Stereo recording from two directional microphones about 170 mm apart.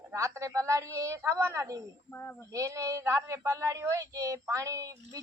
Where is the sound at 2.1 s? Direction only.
15° left (ahead or behind).